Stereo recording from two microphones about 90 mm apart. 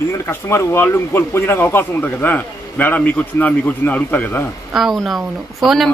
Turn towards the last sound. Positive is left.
turn(degrees=0)  # may be behind; listen again after turning